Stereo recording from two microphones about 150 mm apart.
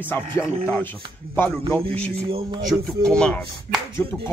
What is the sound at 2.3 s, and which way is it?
Speech, 40° right (ahead or behind).